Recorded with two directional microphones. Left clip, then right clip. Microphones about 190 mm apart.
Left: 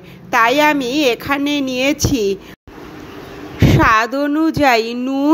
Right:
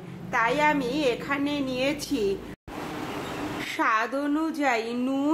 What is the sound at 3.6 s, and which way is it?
A woman's voice, 35° left (ahead or behind).